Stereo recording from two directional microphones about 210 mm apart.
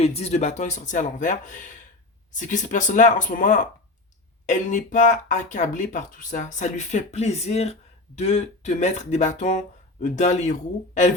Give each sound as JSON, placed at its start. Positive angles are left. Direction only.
{"t": 0.0, "sound": "speech", "side_deg": 30}